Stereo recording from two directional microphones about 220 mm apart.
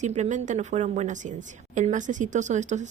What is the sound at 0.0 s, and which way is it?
Speech, 30° right (ahead or behind).